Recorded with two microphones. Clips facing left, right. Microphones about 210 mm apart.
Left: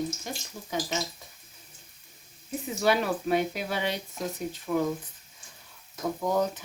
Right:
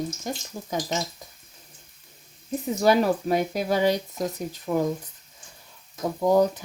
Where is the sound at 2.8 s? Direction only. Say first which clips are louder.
Right 5 dB; 40° right (ahead or behind).